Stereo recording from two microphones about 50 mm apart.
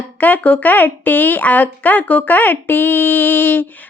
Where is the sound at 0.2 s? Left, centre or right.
Left.